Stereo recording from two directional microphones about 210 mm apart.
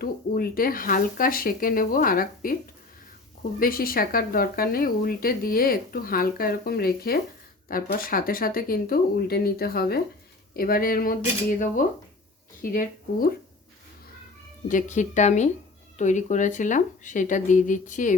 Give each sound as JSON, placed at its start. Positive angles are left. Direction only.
{"t": 0.0, "sound": "speech", "side_deg": 45}
{"t": 3.6, "sound": "speech", "side_deg": 45}
{"t": 14.7, "sound": "speech", "side_deg": 35}